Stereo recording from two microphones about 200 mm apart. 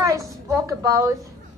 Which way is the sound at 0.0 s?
15° right (ahead or behind).